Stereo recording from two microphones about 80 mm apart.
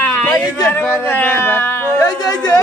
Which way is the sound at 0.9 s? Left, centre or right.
Left.